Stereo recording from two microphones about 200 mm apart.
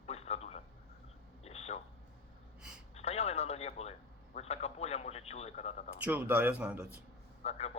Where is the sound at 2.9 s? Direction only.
30° left (ahead or behind).